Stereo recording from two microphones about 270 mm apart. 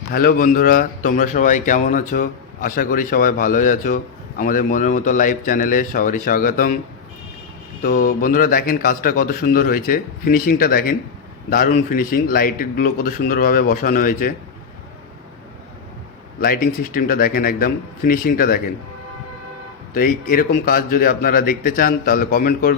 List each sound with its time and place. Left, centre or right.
0.1 s a man's voice: left
7.8 s a man's voice: left
16.4 s a man's voice: left
19.9 s a man's voice: left